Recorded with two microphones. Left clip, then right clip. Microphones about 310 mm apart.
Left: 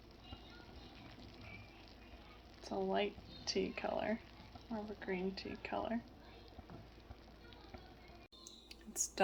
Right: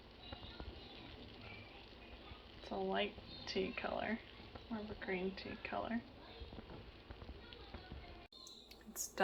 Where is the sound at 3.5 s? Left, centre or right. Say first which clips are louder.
Left 1 dB; centre.